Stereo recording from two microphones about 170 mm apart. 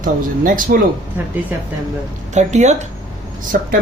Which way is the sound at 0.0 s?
55° right (ahead or behind).